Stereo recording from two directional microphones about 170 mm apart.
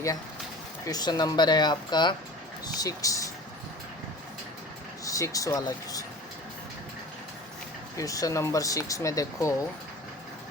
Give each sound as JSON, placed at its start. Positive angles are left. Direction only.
{"t": 0.9, "sound": "speech", "side_deg": 25}
{"t": 5.0, "sound": "speech", "side_deg": 20}
{"t": 7.9, "sound": "speech", "side_deg": 20}